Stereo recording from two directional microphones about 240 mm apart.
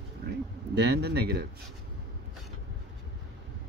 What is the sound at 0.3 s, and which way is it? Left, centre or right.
Speech, right.